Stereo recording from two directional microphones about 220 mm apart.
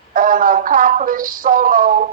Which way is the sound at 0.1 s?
40° right (ahead or behind).